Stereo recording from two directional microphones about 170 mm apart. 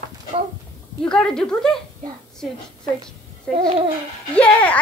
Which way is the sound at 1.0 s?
5° left (ahead or behind).